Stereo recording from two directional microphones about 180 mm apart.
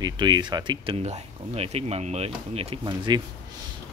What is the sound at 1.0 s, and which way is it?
Speech, 40° right (ahead or behind).